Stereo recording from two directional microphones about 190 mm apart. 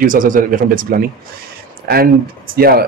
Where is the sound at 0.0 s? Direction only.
45° right (ahead or behind).